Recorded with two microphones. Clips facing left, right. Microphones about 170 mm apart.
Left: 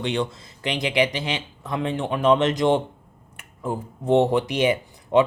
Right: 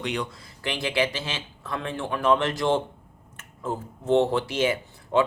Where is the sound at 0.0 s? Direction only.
25° left (ahead or behind).